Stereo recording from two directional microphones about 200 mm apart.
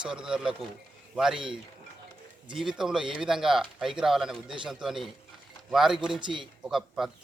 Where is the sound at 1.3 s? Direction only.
25° right (ahead or behind).